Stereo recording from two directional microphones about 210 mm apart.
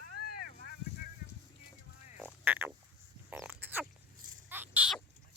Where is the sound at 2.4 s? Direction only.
10° right (ahead or behind).